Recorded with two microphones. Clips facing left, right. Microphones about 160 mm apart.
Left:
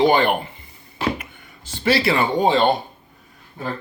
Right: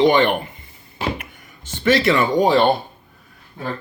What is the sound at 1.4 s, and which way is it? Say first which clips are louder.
Speech: right 2 dB; 30° left (ahead or behind).